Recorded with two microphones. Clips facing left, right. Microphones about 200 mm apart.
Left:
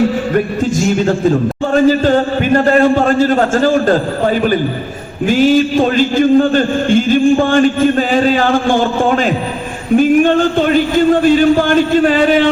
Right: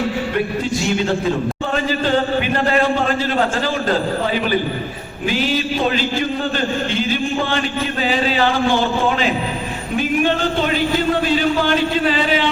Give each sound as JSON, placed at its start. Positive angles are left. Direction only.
{"t": 0.3, "sound": "a man's voice", "side_deg": 45}